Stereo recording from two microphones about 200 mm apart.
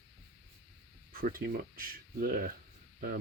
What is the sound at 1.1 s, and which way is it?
Speech, 45° right (ahead or behind).